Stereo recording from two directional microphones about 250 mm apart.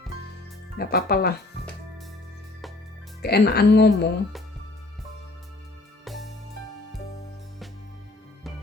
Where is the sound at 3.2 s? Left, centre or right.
Left.